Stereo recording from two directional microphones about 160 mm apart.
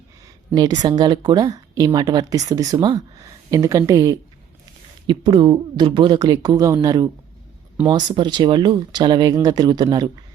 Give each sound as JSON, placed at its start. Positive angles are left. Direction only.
{"t": 0.5, "sound": "speech", "side_deg": -25}